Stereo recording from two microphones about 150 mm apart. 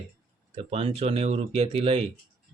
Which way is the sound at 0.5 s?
40° right (ahead or behind).